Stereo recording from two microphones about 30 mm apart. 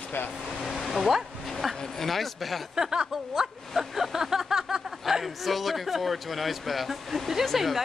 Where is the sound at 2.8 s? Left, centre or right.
Right.